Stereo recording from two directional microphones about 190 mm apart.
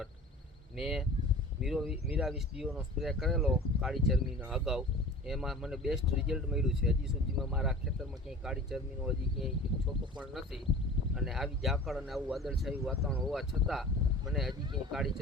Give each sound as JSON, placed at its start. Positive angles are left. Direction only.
{"t": 0.8, "sound": "speech", "side_deg": 0}